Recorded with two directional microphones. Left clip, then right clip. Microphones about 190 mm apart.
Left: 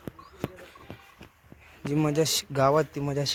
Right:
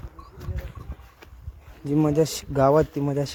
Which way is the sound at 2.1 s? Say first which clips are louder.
Right 3 dB; 20° right (ahead or behind).